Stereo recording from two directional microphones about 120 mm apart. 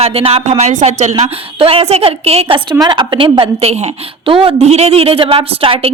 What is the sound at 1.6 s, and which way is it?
A woman's voice, 50° right (ahead or behind).